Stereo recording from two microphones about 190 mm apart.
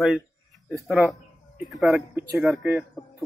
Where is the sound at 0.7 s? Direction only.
Centre (ahead or behind).